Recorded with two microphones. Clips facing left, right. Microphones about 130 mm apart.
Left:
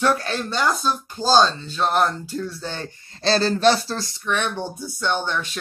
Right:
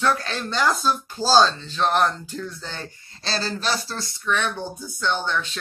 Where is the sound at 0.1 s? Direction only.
5° left (ahead or behind).